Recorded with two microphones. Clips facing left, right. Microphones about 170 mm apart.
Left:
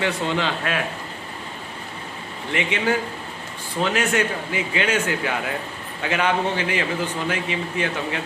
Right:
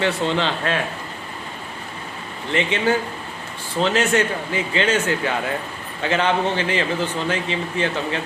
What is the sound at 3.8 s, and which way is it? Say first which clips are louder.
Speech: right 3 dB; 30° right (ahead or behind).